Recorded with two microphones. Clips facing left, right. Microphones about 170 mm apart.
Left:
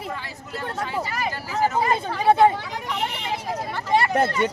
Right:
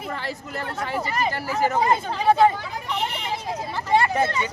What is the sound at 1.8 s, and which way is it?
Speech, 20° right (ahead or behind).